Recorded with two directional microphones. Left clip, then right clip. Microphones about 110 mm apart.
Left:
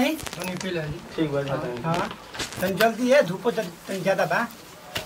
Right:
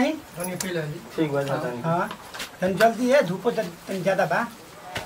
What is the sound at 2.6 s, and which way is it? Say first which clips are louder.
A man's voice: right 1 dB; centre (ahead or behind).